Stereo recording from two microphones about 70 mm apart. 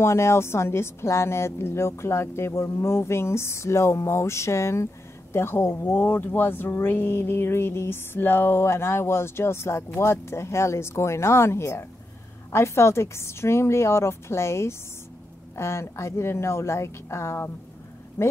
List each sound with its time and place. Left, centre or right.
0.0 s a woman's voice: left